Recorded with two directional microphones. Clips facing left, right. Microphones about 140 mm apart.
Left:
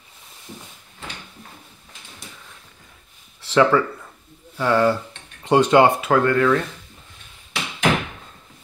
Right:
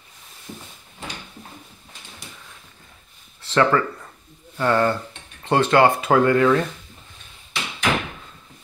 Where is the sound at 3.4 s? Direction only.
5° left (ahead or behind).